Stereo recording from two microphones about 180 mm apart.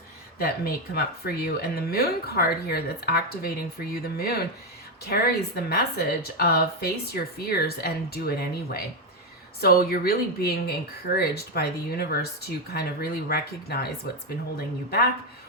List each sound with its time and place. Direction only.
0.3 s speech: 60° left (ahead or behind)
14.8 s speech: 60° left (ahead or behind)